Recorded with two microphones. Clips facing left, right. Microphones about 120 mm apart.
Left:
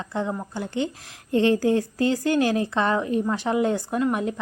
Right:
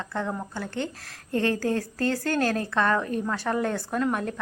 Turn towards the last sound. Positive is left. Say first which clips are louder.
# left 3 dB
turn(degrees=15)  # may be behind; listen again after turning